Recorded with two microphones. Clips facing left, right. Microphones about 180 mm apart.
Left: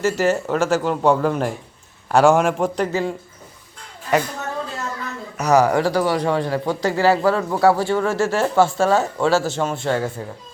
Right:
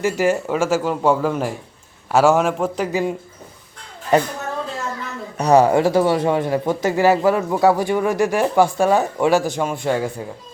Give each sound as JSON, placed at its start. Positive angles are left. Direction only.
{"t": 0.0, "sound": "a man's voice", "side_deg": -10}
{"t": 4.1, "sound": "a woman's voice", "side_deg": -30}
{"t": 5.4, "sound": "speech", "side_deg": -30}